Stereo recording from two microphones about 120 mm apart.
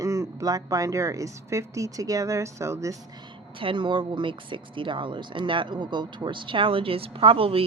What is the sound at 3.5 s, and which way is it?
Speech, 45° right (ahead or behind).